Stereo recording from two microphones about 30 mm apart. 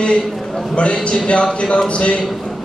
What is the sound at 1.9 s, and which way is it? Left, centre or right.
Speech, left.